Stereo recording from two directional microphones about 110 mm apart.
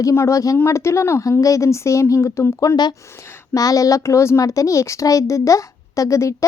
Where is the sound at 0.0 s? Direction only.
25° left (ahead or behind).